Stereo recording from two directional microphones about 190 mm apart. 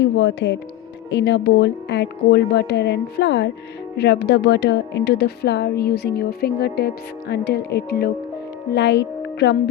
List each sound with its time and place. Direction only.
0.0 s speech: 65° left (ahead or behind)